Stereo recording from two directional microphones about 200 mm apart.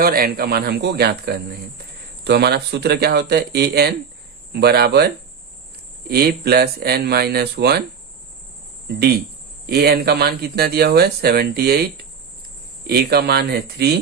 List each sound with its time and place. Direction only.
0.0 s speech: 50° right (ahead or behind)
9.6 s speech: 50° right (ahead or behind)
12.9 s speech: 55° right (ahead or behind)